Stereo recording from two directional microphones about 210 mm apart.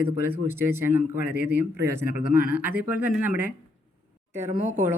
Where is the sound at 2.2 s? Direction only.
40° left (ahead or behind).